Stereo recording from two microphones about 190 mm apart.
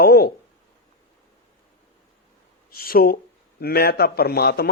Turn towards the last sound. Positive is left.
turn(degrees=55)  # may be behind; listen again after turning